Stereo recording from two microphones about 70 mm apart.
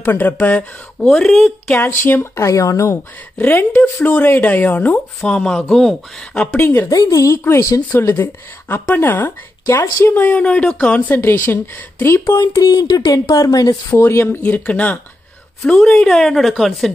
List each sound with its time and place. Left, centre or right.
0.0 s speech: left
1.0 s speech: centre
1.8 s speech: left
2.3 s speech: left
3.3 s speech: left
5.2 s a woman's voice: centre
6.5 s speech: left
6.9 s speech: left
8.0 s speech: left; by 11.0 s centre
11.1 s speech: left
12.3 s speech: left
12.6 s speech: left
13.9 s speech: left
15.6 s a woman's voice: centre